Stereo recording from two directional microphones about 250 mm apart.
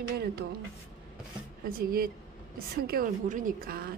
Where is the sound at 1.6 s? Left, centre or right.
Right.